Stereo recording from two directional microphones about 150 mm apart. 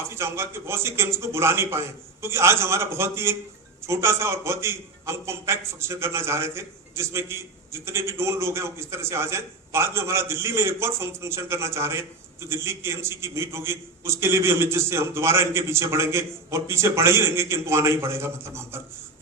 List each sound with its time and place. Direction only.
0.1 s a man's voice: 15° right (ahead or behind)